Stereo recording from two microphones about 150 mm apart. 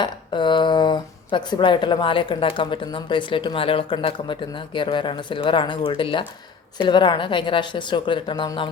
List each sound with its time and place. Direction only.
0.0 s speech: 30° left (ahead or behind)